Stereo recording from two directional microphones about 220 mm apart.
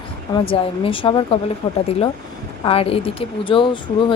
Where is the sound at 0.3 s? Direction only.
25° left (ahead or behind).